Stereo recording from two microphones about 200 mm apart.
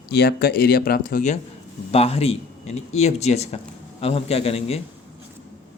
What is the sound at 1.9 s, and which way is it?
A man's voice, 30° left (ahead or behind).